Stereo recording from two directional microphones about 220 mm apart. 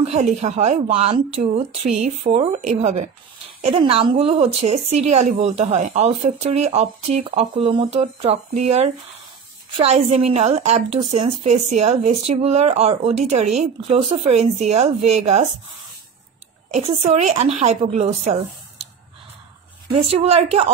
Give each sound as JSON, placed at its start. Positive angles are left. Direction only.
{"t": 0.0, "sound": "a woman's voice", "side_deg": -30}
{"t": 16.7, "sound": "a woman's voice", "side_deg": -30}
{"t": 19.9, "sound": "a woman's voice", "side_deg": -30}